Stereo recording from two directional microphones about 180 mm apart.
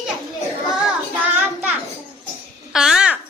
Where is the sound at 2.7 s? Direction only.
5° right (ahead or behind).